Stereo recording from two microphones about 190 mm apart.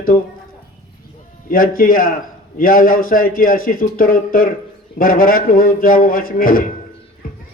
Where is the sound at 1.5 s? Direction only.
45° left (ahead or behind).